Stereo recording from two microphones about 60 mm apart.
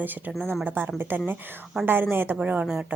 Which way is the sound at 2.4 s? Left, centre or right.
Right.